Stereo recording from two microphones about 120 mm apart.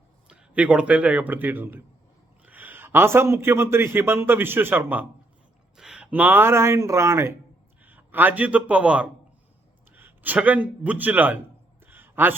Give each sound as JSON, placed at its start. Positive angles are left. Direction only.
{"t": 0.3, "sound": "a man's voice", "side_deg": -10}
{"t": 5.7, "sound": "a man's voice", "side_deg": -5}
{"t": 11.9, "sound": "a sound", "side_deg": -15}